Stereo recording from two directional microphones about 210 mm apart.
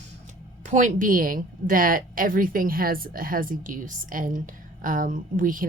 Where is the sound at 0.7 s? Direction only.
35° right (ahead or behind).